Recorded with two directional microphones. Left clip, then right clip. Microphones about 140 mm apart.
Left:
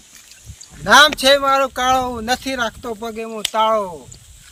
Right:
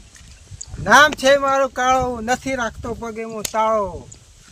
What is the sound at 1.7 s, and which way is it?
Speech, 10° right (ahead or behind).